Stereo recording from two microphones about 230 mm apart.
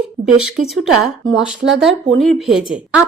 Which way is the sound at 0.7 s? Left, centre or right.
Centre.